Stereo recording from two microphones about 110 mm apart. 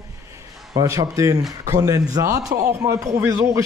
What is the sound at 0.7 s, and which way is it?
A man's voice, 30° right (ahead or behind).